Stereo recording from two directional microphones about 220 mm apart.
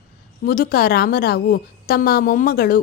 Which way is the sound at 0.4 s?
40° left (ahead or behind).